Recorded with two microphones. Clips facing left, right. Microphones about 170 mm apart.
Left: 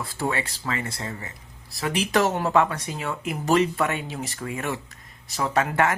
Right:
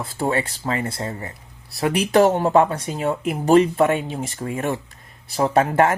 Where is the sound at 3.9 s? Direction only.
45° right (ahead or behind).